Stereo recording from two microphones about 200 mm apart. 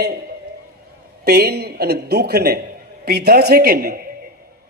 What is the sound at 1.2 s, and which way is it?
Speech, 50° right (ahead or behind).